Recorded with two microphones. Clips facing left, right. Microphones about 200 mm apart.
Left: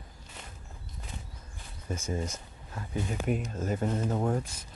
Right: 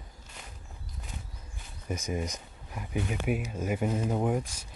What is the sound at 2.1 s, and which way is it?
Speech, 15° right (ahead or behind).